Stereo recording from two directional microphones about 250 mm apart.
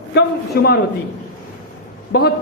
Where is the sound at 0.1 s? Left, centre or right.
Left.